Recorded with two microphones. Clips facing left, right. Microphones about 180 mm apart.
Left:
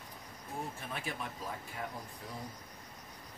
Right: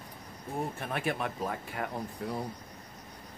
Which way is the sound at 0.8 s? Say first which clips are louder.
Right 8 dB; 65° right (ahead or behind).